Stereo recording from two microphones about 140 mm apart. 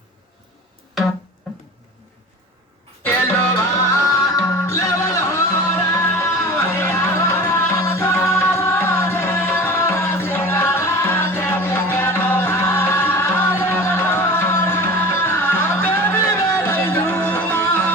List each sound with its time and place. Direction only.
3.5 s music: 20° left (ahead or behind)